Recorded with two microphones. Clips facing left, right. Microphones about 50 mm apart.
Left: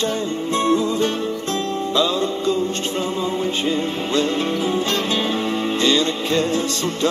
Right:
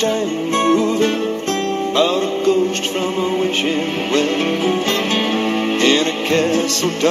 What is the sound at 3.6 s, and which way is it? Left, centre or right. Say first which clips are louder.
Music: right 3 dB; right.